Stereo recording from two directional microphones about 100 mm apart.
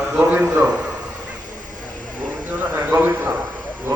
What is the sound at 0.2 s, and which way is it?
Speech, 10° right (ahead or behind).